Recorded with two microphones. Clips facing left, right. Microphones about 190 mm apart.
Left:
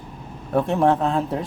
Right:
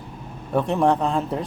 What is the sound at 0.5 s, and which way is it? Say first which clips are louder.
Speech: left 1 dB; centre (ahead or behind).